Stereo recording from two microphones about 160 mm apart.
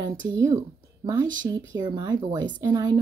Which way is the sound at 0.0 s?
20° right (ahead or behind).